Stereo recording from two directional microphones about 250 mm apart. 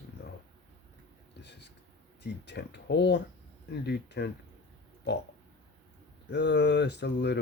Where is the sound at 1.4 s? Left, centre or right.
Left.